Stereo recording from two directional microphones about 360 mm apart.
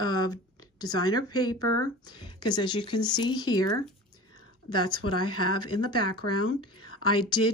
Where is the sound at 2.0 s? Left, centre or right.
Centre.